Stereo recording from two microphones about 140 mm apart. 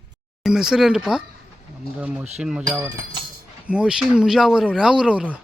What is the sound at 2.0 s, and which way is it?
Speech, 5° right (ahead or behind).